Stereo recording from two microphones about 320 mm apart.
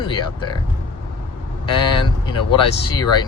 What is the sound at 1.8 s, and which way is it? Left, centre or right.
Speech, centre.